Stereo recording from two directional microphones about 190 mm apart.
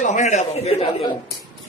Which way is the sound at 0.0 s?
40° left (ahead or behind).